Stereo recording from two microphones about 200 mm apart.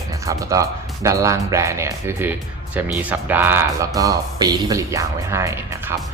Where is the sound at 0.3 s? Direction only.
15° right (ahead or behind).